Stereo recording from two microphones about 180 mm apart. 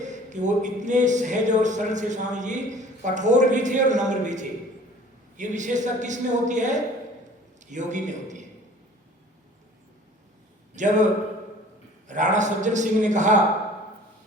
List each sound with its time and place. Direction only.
0.0 s a man's voice: 40° right (ahead or behind)
10.8 s a man's voice: 40° right (ahead or behind)
12.0 s speech: 45° right (ahead or behind)